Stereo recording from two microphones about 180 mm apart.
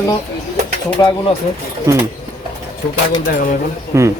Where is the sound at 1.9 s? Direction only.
20° right (ahead or behind).